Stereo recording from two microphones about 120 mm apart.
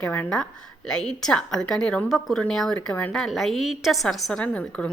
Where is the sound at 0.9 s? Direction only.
5° left (ahead or behind).